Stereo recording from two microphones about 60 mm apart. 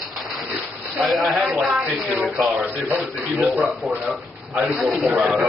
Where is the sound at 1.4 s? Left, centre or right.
Centre.